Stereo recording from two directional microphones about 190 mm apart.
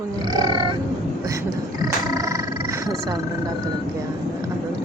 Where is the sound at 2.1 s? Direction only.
15° right (ahead or behind).